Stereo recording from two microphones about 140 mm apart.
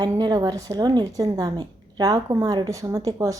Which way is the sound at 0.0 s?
30° right (ahead or behind).